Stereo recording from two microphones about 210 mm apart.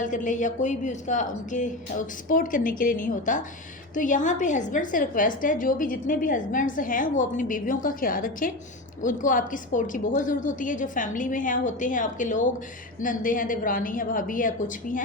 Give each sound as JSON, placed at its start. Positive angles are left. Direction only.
{"t": 0.0, "sound": "a woman's voice", "side_deg": 40}